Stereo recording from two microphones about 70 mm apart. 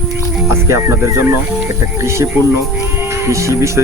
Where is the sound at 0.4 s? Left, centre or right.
Right.